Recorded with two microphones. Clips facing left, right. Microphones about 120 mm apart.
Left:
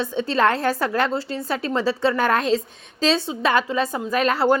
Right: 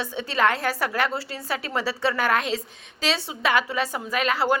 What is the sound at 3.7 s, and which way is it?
Speech, 25° left (ahead or behind).